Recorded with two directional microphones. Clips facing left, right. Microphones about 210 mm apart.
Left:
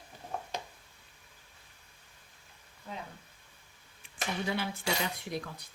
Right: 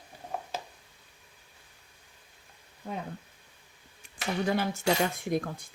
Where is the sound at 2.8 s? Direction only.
50° right (ahead or behind).